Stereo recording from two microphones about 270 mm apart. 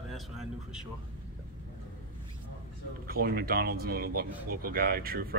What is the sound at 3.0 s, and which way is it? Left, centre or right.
Speech, right.